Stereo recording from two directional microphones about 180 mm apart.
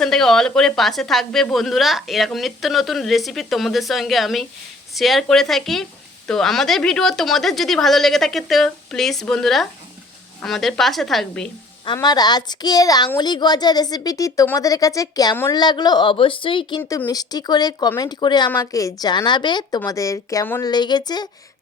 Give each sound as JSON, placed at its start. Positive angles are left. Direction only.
{"t": 0.0, "sound": "a woman's voice", "side_deg": 5}
{"t": 11.9, "sound": "a child's voice", "side_deg": 20}